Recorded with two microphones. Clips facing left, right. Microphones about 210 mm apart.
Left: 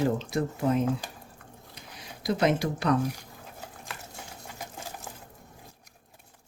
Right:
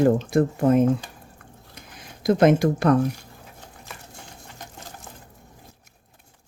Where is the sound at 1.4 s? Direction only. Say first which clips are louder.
Right 2 dB; 50° right (ahead or behind).